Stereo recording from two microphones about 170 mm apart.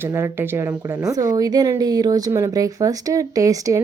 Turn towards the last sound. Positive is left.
turn(degrees=-20)  # may be behind; listen again after turning